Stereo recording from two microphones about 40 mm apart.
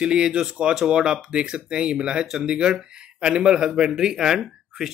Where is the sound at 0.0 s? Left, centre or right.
Right.